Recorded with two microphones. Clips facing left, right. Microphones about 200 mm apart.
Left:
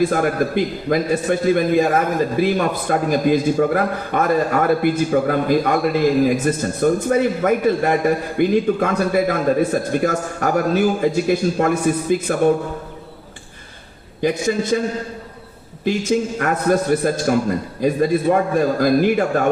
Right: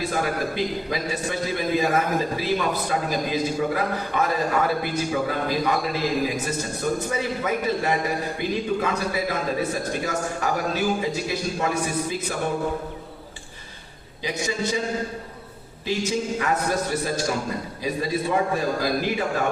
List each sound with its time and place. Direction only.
0.0 s a man's voice: 50° left (ahead or behind)
14.2 s a man's voice: 50° left (ahead or behind)
15.8 s a man's voice: 50° left (ahead or behind)